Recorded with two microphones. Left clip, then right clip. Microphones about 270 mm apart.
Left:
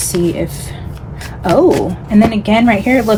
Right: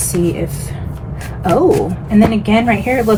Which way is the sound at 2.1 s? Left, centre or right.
Left.